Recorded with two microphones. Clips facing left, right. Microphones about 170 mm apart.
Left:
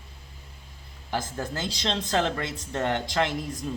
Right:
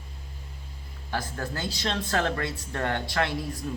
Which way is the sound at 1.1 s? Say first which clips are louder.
Left 1 dB; 15° left (ahead or behind).